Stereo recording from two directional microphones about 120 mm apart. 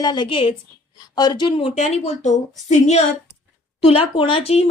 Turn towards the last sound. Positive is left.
turn(degrees=55)  # may be behind; listen again after turning